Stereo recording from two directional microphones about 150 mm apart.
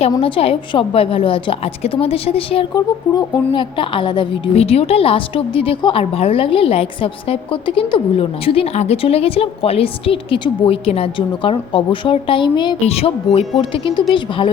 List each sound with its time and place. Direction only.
0.2 s a woman's voice: 35° left (ahead or behind)
12.8 s a woman's voice: 45° left (ahead or behind)